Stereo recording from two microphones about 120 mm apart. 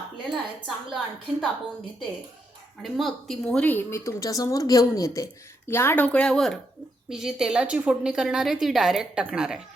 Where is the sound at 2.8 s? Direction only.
Centre (ahead or behind).